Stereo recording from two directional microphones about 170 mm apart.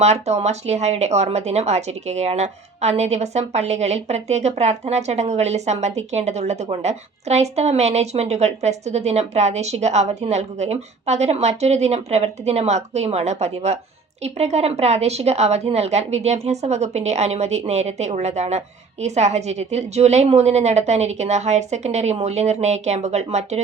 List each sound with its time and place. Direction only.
0.0 s speech: 40° right (ahead or behind)